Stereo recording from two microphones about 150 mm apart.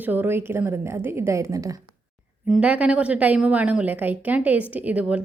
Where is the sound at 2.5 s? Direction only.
10° right (ahead or behind).